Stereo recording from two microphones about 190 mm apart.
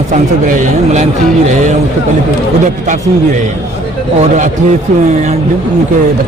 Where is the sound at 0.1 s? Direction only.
45° right (ahead or behind).